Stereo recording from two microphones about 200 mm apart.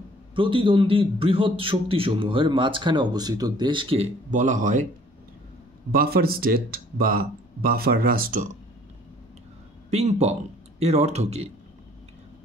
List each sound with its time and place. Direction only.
0.4 s a man's voice: 25° right (ahead or behind)
5.9 s speech: 50° right (ahead or behind)
9.8 s speech: 35° right (ahead or behind)